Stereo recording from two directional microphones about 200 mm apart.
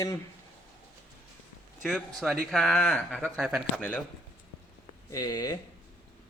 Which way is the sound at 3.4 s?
5° right (ahead or behind).